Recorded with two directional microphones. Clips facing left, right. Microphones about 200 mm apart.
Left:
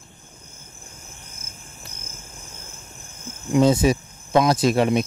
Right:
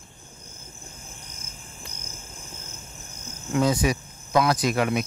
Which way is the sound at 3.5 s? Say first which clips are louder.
Left 6 dB; 25° left (ahead or behind).